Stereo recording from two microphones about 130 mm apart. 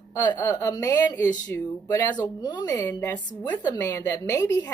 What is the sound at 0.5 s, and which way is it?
Speech, 25° left (ahead or behind).